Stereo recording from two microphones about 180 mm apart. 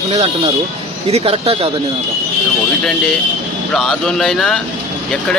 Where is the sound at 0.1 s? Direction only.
30° right (ahead or behind).